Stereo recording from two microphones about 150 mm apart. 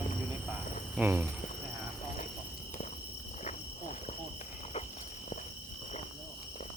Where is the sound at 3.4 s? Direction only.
50° left (ahead or behind).